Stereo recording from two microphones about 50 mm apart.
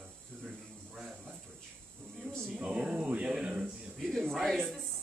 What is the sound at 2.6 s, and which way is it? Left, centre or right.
Speech, centre.